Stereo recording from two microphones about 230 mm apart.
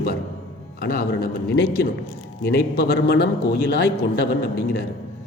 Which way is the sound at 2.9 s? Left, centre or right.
Left.